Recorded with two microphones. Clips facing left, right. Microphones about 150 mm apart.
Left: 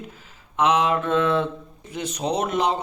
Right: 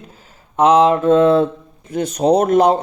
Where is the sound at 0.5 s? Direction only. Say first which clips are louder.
Right 8 dB; 35° right (ahead or behind).